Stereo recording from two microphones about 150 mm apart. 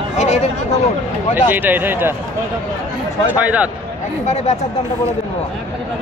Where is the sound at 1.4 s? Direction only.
10° right (ahead or behind).